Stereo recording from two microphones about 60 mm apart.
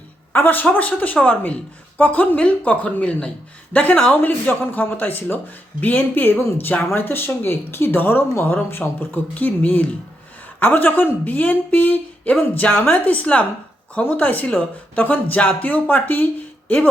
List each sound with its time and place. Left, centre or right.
0.3 s speech: left